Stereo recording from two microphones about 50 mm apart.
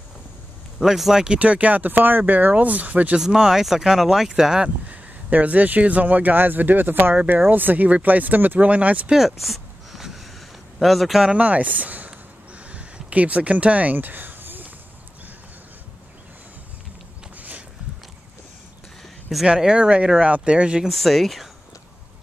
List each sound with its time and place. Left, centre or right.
0.7 s speech: centre
1.4 s speech: right
3.2 s speech: centre
4.8 s speech: right
9.1 s a sound: centre
10.8 s speech: centre
11.3 s speech: right
12.7 s a sound: right
17.4 s a sound: right
19.4 s speech: centre
20.9 s speech: centre